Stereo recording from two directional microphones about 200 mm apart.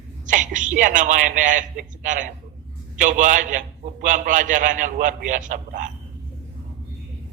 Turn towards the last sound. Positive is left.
turn(degrees=-40)  # may be behind; listen again after turning